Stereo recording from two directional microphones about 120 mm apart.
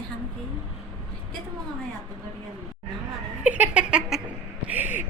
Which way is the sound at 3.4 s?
10° right (ahead or behind).